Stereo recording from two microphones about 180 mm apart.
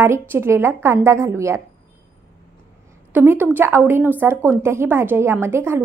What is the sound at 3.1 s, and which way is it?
A woman's voice, 10° right (ahead or behind).